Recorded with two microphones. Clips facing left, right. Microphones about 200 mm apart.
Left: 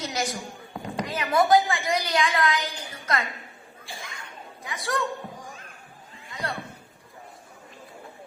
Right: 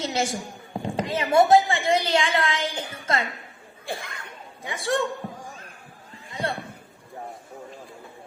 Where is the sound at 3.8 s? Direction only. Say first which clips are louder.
Right 8 dB; 60° right (ahead or behind).